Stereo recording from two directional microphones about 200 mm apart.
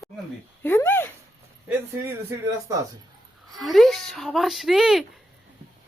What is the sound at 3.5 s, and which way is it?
Speech, centre (ahead or behind).